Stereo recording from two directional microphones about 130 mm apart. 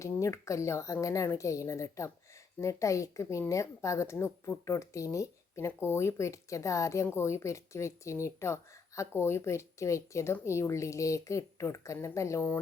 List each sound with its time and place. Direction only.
0.0 s speech: 25° left (ahead or behind)